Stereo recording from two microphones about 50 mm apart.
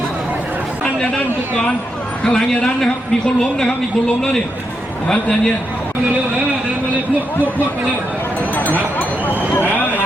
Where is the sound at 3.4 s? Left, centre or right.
Centre.